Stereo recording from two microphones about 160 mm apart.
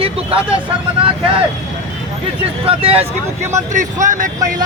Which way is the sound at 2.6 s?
35° right (ahead or behind).